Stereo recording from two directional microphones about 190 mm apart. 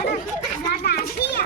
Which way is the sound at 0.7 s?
55° left (ahead or behind).